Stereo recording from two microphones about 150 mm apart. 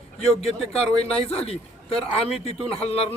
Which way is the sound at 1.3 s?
40° left (ahead or behind).